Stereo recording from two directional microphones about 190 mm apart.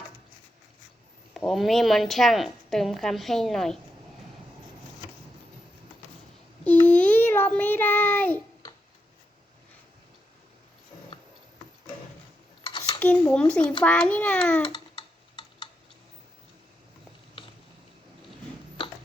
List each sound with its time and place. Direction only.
1.3 s a woman's voice: centre (ahead or behind)
6.7 s child singing: 10° left (ahead or behind)
12.6 s a sound: 25° left (ahead or behind)
13.0 s a sound: 10° left (ahead or behind)
13.8 s a woman's voice: 5° left (ahead or behind)
14.7 s tick-tock: 25° left (ahead or behind)